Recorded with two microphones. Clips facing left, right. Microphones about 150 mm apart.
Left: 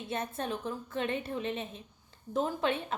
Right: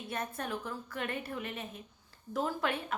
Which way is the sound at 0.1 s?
25° left (ahead or behind).